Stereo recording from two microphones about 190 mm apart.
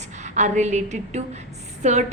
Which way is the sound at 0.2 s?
40° right (ahead or behind).